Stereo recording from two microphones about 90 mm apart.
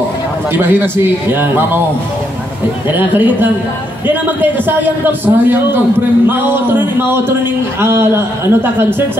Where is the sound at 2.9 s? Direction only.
20° right (ahead or behind).